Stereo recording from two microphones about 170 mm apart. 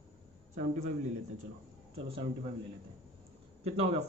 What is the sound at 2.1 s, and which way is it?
Speech, 35° right (ahead or behind).